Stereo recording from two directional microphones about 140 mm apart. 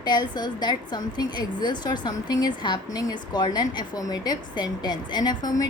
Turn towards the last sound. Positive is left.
turn(degrees=25)  # may be behind; listen again after turning